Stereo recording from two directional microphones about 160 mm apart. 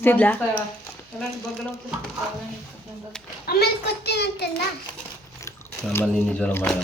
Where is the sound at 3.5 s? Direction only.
85° left.